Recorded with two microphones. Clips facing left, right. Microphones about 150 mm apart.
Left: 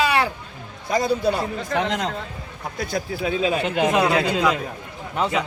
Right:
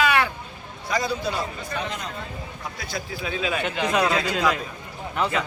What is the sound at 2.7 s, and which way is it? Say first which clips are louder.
Speech: left 8 dB; 50° left (ahead or behind).